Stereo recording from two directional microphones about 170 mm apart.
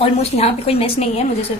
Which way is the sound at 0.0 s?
35° left (ahead or behind).